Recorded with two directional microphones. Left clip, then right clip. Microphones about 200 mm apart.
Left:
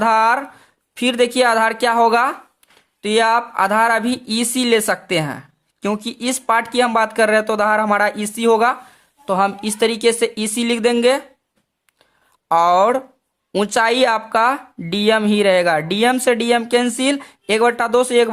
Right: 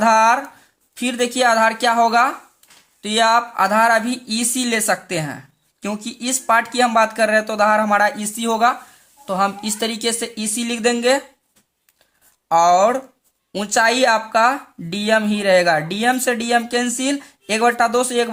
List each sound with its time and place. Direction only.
0.0 s a woman's voice: 30° left (ahead or behind)
12.5 s a woman's voice: 35° left (ahead or behind)